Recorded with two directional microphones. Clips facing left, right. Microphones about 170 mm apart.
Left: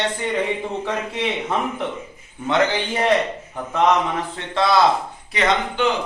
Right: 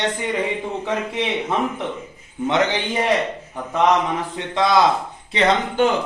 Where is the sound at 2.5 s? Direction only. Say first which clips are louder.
Left 1 dB; 20° right (ahead or behind).